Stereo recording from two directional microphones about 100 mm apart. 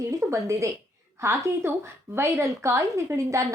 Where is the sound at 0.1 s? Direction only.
30° right (ahead or behind).